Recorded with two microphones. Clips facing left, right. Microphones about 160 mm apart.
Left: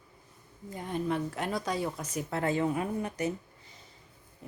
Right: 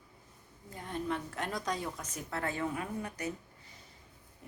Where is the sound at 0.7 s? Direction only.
15° left (ahead or behind).